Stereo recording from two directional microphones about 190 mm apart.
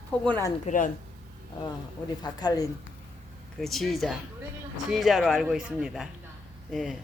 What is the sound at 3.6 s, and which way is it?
Speech, centre (ahead or behind).